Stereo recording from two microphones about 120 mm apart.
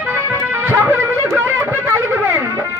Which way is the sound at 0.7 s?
20° right (ahead or behind).